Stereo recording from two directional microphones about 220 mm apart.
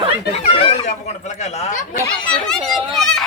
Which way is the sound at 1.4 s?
35° left (ahead or behind).